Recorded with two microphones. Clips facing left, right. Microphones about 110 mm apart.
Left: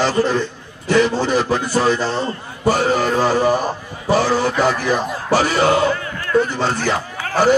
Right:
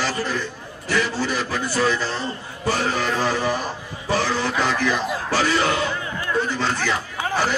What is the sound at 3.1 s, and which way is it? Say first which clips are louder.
Music: left 6 dB; 40° left (ahead or behind).